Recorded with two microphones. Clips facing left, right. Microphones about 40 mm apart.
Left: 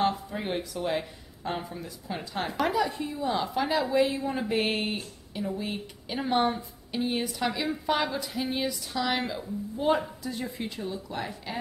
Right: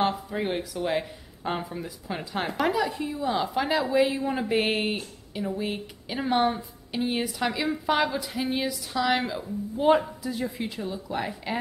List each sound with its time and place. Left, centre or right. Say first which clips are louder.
0.1 s speech: right 3 dB; centre
2.5 s speech: right 1 dB; centre
9.8 s speech: right 5 dB; centre
10.2 s speech: right 3 dB; centre